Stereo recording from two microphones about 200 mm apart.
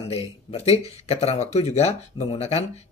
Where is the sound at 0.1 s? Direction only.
30° left (ahead or behind).